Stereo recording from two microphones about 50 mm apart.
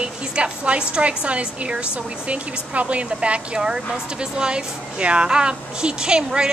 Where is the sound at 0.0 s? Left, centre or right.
Right.